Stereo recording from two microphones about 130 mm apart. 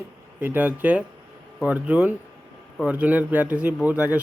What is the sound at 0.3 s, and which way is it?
A man's voice, 15° right (ahead or behind).